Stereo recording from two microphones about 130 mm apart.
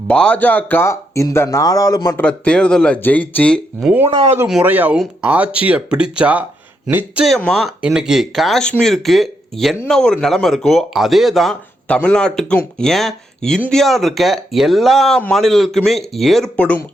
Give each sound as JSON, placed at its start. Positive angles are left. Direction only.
{"t": 0.1, "sound": "speech", "side_deg": 10}
{"t": 2.1, "sound": "speech", "side_deg": 10}
{"t": 4.1, "sound": "speech", "side_deg": -45}
{"t": 4.6, "sound": "speech", "side_deg": -15}
{"t": 7.3, "sound": "speech", "side_deg": 0}